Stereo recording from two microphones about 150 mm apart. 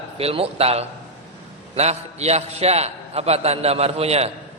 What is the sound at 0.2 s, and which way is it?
A man's voice, 40° right (ahead or behind).